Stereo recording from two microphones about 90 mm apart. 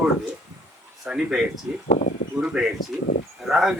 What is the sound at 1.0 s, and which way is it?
Speech, 5° right (ahead or behind).